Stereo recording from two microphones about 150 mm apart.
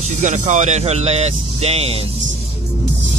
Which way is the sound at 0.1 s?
55° right (ahead or behind).